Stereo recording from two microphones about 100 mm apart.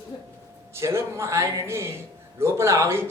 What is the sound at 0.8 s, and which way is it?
Speech, 25° right (ahead or behind).